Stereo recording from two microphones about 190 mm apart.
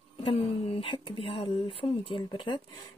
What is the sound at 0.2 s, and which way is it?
Speech, 25° left (ahead or behind).